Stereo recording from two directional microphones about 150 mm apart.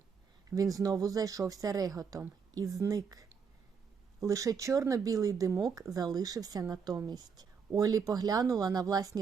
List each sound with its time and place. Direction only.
0.5 s speech: 25° right (ahead or behind)